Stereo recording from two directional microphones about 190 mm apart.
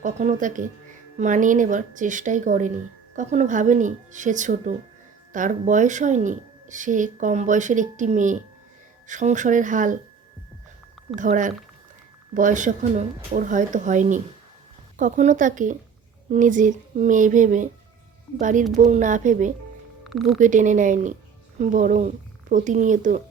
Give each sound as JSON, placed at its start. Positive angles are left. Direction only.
{"t": 0.0, "sound": "speech", "side_deg": -40}
{"t": 11.1, "sound": "speech", "side_deg": -45}